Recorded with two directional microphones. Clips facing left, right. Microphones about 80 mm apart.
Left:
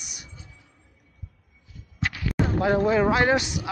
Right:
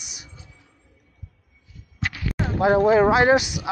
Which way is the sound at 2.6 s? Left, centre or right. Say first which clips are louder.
Right 6 dB; right.